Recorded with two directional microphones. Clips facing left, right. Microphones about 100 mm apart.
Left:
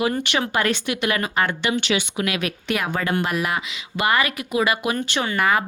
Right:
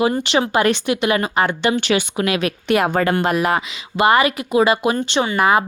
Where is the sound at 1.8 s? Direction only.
45° right (ahead or behind).